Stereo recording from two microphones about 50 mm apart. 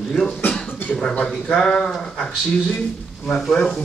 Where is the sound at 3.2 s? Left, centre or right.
Centre.